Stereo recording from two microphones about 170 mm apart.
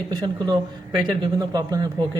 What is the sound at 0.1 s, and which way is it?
Speech, 25° right (ahead or behind).